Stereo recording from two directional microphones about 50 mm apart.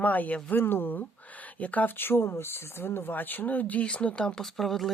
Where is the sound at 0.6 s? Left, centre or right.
Left.